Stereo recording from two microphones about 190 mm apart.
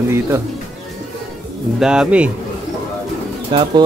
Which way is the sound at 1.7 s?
5° right (ahead or behind).